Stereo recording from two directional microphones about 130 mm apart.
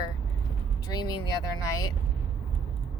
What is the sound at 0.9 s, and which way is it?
Speech, 30° left (ahead or behind).